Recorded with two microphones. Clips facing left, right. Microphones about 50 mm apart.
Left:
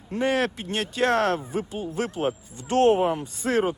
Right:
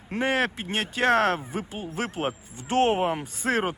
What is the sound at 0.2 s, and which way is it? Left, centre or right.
Speech, right.